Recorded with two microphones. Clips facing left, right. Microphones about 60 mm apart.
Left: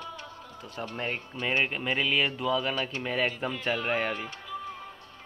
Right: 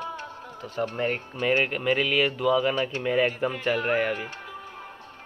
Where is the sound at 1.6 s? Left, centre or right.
Centre.